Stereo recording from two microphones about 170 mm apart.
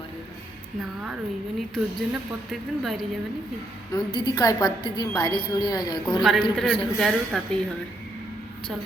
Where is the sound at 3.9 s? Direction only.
25° left (ahead or behind).